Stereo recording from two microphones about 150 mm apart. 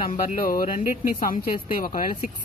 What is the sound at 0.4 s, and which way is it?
Speech, 65° left (ahead or behind).